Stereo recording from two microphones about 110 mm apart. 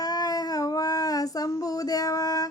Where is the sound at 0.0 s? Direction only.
35° left (ahead or behind).